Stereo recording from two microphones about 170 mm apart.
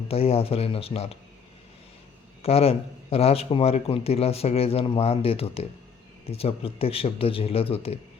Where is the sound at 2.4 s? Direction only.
35° left (ahead or behind).